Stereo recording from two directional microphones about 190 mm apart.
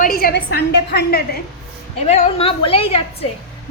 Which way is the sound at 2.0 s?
35° left (ahead or behind).